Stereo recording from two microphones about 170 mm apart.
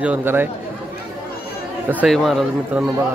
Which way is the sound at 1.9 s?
10° right (ahead or behind).